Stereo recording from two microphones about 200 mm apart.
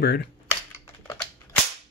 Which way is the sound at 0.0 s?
55° left (ahead or behind).